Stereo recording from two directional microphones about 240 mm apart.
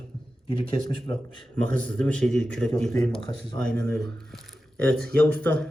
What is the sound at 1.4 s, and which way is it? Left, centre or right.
Speech, centre.